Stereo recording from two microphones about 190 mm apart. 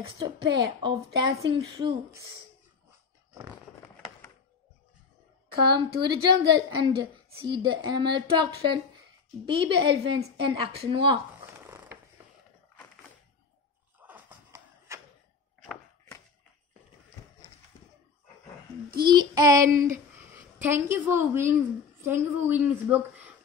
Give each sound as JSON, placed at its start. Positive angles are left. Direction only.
{"t": 0.2, "sound": "a woman's voice", "side_deg": -25}
{"t": 5.5, "sound": "a woman's voice", "side_deg": -25}
{"t": 11.6, "sound": "a sound", "side_deg": -10}
{"t": 14.0, "sound": "a sound", "side_deg": -10}
{"t": 19.0, "sound": "child singing", "side_deg": -20}
{"t": 20.6, "sound": "a woman's voice", "side_deg": -10}